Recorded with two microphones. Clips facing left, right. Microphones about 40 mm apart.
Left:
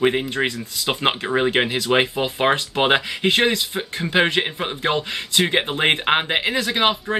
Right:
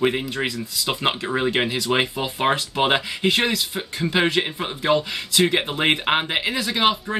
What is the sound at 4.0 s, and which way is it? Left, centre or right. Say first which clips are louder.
Speech: left 2 dB; centre.